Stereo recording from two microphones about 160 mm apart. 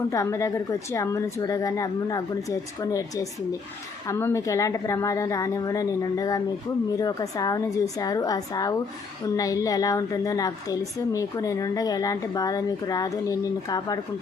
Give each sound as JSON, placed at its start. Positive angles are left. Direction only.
{"t": 0.1, "sound": "a woman's voice", "side_deg": 20}